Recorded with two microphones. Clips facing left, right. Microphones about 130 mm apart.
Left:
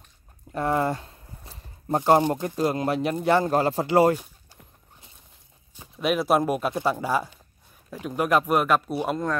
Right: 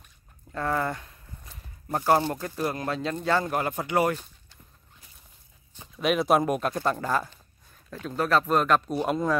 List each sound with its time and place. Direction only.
0.5 s speech: 20° left (ahead or behind)
5.9 s speech: centre (ahead or behind)